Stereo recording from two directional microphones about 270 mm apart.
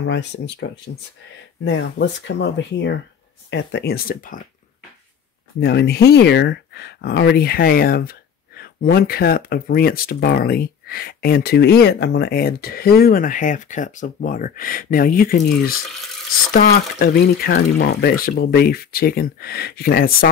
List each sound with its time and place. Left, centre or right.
0.0 s speech: left
5.6 s speech: left
16.5 s speech: left